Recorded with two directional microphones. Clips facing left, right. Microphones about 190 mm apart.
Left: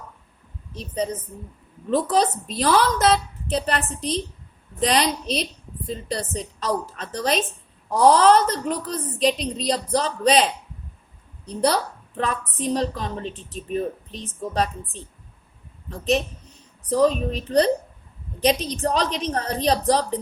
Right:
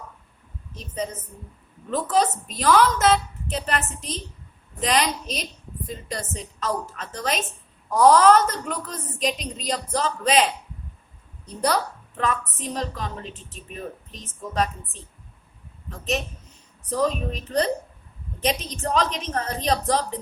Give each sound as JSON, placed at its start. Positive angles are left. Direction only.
{"t": 0.7, "sound": "a woman's voice", "side_deg": 35}
{"t": 11.4, "sound": "a woman's voice", "side_deg": 30}
{"t": 15.9, "sound": "a woman's voice", "side_deg": 35}